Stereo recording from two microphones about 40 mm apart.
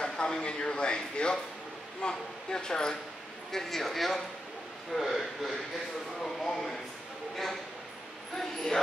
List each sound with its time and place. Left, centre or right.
0.0 s speech: left
3.5 s a man's voice: centre